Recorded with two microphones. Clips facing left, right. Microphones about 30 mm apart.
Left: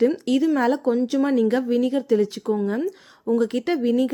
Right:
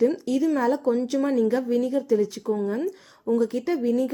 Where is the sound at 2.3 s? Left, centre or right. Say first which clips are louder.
Left 2 dB; left.